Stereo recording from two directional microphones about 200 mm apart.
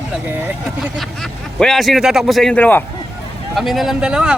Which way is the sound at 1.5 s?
Centre (ahead or behind).